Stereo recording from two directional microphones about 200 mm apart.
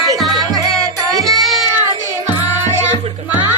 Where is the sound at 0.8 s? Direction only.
15° right (ahead or behind).